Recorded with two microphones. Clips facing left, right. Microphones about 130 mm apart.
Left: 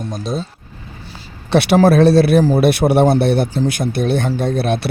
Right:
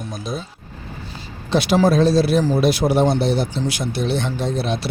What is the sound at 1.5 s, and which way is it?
Speech, 65° left (ahead or behind).